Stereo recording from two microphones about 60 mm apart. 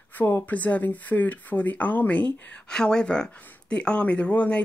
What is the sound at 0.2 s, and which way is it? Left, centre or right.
Speech, left.